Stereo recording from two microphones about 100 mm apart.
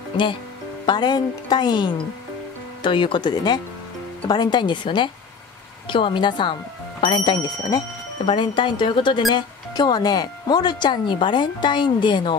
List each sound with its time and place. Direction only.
0.8 s speech: 50° left (ahead or behind)